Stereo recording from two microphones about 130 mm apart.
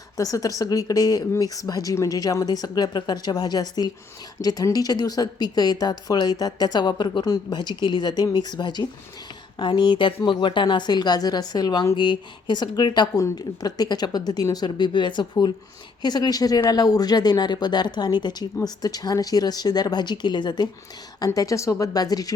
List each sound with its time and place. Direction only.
0.2 s speech: 25° left (ahead or behind)